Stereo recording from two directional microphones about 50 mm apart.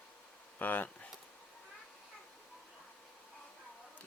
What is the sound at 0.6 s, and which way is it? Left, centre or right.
Speech, left.